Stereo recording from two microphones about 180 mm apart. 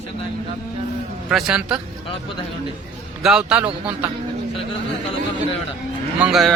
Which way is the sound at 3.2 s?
5° right (ahead or behind).